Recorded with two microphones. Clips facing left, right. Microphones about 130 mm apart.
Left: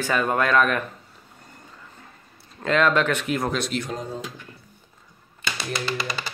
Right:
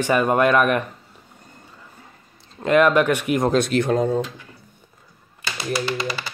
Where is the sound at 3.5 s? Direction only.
55° right (ahead or behind).